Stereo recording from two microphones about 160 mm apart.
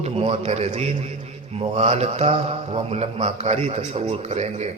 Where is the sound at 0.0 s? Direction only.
40° right (ahead or behind).